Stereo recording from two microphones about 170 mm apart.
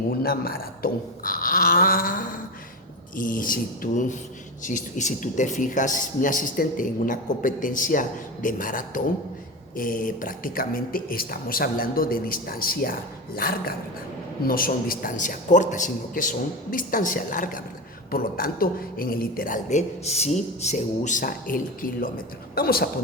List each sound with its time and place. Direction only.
0.1 s speech: 65° left (ahead or behind)